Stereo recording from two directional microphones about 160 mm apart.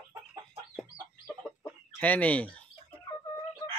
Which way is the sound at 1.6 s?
10° left (ahead or behind).